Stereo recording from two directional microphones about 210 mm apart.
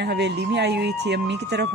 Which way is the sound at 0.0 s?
55° right (ahead or behind).